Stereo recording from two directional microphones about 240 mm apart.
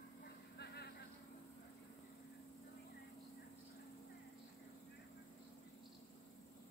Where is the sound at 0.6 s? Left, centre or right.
Left.